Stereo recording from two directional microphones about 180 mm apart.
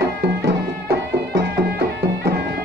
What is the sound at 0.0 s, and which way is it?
Music, 65° right (ahead or behind).